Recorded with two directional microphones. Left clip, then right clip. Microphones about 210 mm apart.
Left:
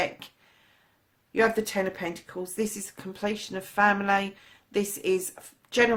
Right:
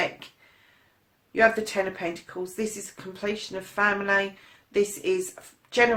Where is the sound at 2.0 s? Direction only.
45° left (ahead or behind).